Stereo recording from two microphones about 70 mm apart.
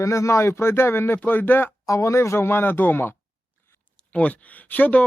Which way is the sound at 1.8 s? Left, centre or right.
Left.